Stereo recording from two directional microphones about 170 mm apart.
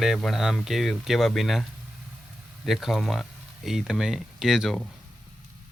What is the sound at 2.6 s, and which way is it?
Speech, centre (ahead or behind).